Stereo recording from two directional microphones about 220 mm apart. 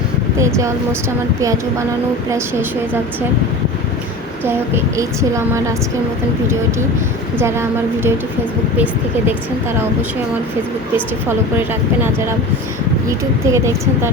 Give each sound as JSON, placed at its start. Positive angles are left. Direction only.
{"t": 0.3, "sound": "a woman's voice", "side_deg": -15}
{"t": 2.3, "sound": "a woman's voice", "side_deg": -10}
{"t": 4.4, "sound": "a woman's voice", "side_deg": -10}
{"t": 7.3, "sound": "a woman's voice", "side_deg": -10}
{"t": 13.1, "sound": "a woman's voice", "side_deg": -15}